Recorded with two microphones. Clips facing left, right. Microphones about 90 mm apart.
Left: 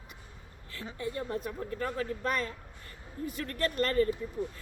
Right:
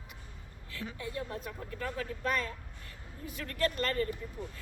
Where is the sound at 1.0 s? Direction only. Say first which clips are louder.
Left 6 dB; 55° left (ahead or behind).